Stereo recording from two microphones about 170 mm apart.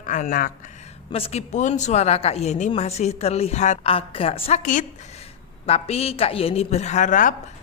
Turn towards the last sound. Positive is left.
turn(degrees=50)  # may be behind; listen again after turning